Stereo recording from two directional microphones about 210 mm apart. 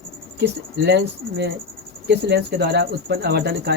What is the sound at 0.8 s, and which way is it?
Speech, 55° right (ahead or behind).